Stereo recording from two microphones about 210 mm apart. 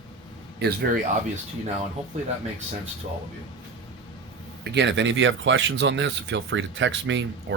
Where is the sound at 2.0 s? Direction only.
30° right (ahead or behind).